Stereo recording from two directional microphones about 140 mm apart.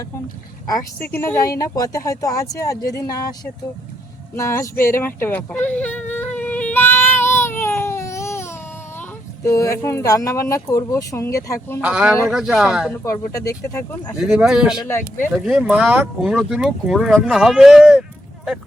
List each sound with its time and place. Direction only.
1.0 s speech: 15° left (ahead or behind)
1.4 s speech: 25° left (ahead or behind)
4.9 s whimper: 15° left (ahead or behind)
9.0 s speech: 20° left (ahead or behind)
11.8 s speech: 10° right (ahead or behind)
13.1 s speech: 25° left (ahead or behind)
14.2 s speech: 5° right (ahead or behind)
14.8 s speech: 15° left (ahead or behind)
15.4 s speech: 5° right (ahead or behind)